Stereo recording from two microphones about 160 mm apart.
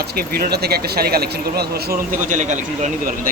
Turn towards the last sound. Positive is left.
turn(degrees=-55)  # may be behind; listen again after turning